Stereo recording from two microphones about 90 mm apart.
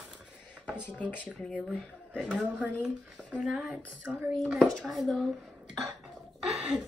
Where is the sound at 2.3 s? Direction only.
15° right (ahead or behind).